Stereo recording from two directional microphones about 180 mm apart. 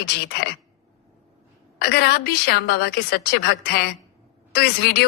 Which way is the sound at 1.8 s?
65° left (ahead or behind).